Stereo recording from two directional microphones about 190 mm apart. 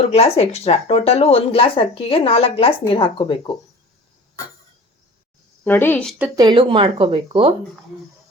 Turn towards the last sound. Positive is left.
turn(degrees=-30)  # may be behind; listen again after turning